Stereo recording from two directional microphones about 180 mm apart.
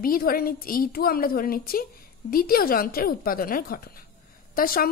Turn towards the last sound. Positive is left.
turn(degrees=55)  # may be behind; listen again after turning